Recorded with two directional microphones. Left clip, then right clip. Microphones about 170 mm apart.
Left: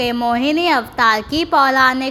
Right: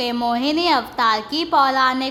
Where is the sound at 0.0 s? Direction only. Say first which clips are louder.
Left 3 dB; 15° left (ahead or behind).